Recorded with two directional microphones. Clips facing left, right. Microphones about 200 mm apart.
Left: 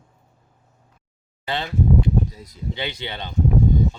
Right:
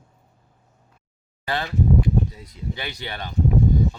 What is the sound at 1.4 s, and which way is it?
Speech, 20° left (ahead or behind).